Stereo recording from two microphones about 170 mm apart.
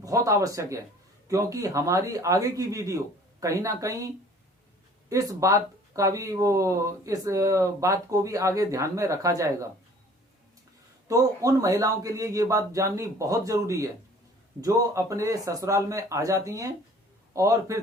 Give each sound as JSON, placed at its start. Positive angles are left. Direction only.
{"t": 0.0, "sound": "speech", "side_deg": -20}
{"t": 11.1, "sound": "speech", "side_deg": -20}